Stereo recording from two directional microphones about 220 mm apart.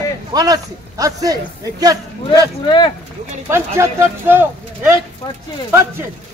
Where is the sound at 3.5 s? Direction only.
10° right (ahead or behind).